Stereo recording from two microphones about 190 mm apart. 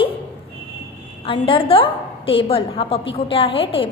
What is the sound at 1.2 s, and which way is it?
A woman's voice, 30° left (ahead or behind).